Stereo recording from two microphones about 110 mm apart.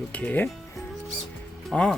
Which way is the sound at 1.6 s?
5° left (ahead or behind).